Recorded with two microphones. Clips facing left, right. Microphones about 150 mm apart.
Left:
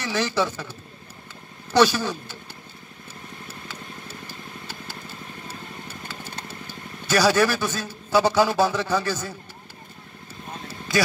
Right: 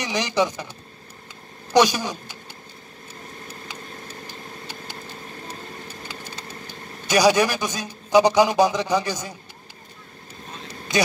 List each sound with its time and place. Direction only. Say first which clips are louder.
0.0 s a man's voice: right 2 dB; 15° right (ahead or behind)
1.7 s a man's voice: right 1 dB; 15° right (ahead or behind)
5.5 s vehicle: right 1 dB; 15° right (ahead or behind)
6.7 s a man's voice: right 2 dB; 15° right (ahead or behind)
10.7 s vehicle: right 1 dB; 20° right (ahead or behind)